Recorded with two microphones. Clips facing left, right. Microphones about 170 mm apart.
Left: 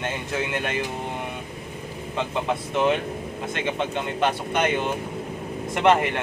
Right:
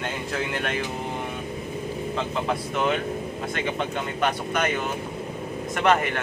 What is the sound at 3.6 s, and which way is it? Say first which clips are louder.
Speech: left 3 dB; 20° left (ahead or behind).